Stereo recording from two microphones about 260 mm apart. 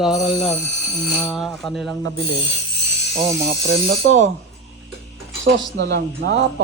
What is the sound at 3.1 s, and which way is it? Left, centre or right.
Speech, centre.